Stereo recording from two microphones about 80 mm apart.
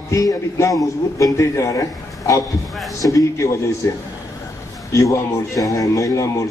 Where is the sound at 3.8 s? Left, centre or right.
Left.